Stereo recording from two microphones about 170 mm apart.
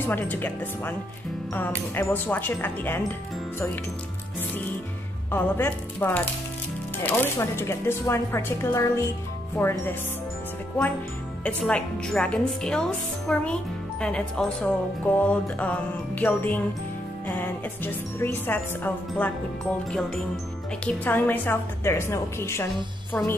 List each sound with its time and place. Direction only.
0.0 s a woman's voice: 10° left (ahead or behind)
5.3 s a woman's voice: 10° left (ahead or behind)
11.4 s a woman's voice: 5° left (ahead or behind)
20.8 s a woman's voice: 10° left (ahead or behind)